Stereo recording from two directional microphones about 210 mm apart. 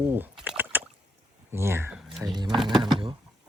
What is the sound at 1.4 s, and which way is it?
Speech, 10° right (ahead or behind).